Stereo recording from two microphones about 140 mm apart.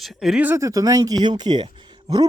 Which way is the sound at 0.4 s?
20° right (ahead or behind).